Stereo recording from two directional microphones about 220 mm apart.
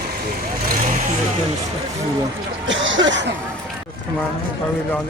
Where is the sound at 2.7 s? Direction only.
60° right (ahead or behind).